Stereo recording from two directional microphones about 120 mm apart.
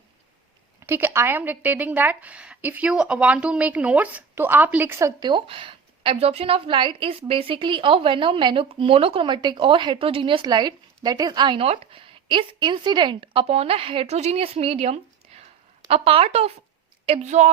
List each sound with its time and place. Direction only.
0.8 s a woman's voice: 20° right (ahead or behind)
5.2 s a woman's voice: 45° right (ahead or behind)
17.2 s a woman's voice: 75° right (ahead or behind)